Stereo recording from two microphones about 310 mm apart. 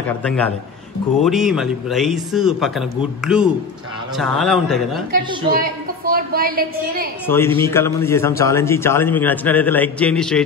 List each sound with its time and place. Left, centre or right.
0.0 s a man's voice: centre
5.1 s a woman's voice: right
7.2 s a man's voice: centre